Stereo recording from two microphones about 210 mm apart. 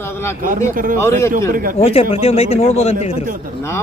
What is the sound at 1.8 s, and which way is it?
Speech, 25° left (ahead or behind).